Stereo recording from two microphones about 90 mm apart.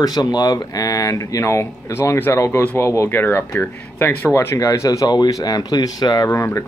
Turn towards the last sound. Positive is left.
turn(degrees=30)  # may be behind; listen again after turning